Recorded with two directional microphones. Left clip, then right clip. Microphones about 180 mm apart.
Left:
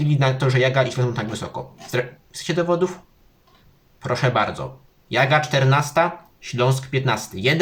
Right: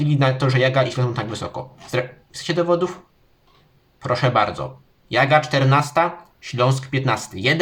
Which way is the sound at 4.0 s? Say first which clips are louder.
Right 2 dB; 20° right (ahead or behind).